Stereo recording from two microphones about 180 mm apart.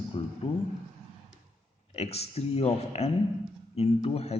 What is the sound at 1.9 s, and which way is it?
A man's voice, 35° left (ahead or behind).